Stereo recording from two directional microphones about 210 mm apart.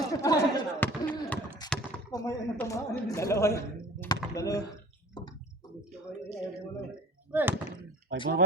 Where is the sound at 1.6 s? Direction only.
20° left (ahead or behind).